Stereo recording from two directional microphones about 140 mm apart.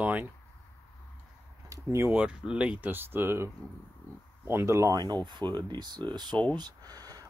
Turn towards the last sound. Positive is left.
turn(degrees=-25)  # may be behind; listen again after turning